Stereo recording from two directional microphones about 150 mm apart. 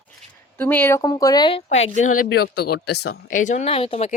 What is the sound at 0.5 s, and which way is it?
Speech, 10° left (ahead or behind).